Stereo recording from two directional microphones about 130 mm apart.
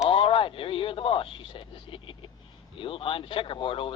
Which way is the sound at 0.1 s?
45° left (ahead or behind).